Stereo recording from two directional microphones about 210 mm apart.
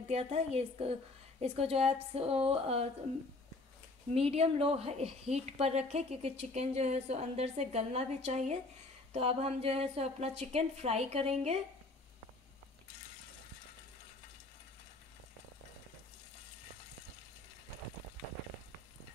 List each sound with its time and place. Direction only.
0.1 s a woman's voice: 30° right (ahead or behind)
4.1 s a woman's voice: 30° right (ahead or behind)